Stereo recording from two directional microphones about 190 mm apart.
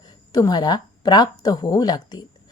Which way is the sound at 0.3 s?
20° left (ahead or behind).